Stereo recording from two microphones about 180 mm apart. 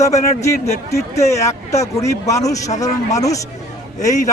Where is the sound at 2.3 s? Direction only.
20° left (ahead or behind).